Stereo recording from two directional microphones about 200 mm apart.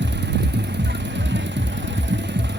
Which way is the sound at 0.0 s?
60° right (ahead or behind).